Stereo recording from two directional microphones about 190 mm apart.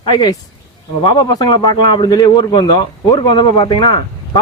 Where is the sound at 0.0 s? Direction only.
20° left (ahead or behind).